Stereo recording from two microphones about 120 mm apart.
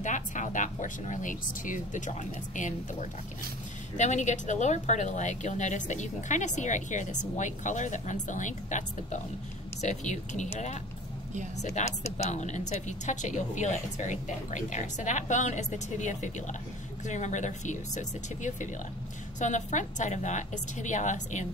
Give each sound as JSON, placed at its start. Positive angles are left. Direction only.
{"t": 0.0, "sound": "speech", "side_deg": 90}
{"t": 9.8, "sound": "a woman's voice", "side_deg": 80}